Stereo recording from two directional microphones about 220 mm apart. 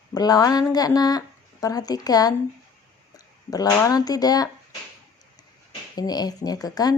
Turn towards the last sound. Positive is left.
turn(degrees=15)  # may be behind; listen again after turning